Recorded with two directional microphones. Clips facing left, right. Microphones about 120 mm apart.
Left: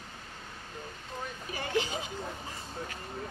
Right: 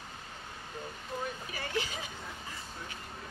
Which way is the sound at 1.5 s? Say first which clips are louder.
Left 7 dB; 25° left (ahead or behind).